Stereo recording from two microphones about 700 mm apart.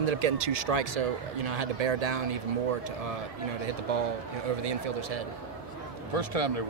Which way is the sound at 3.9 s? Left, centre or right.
Right.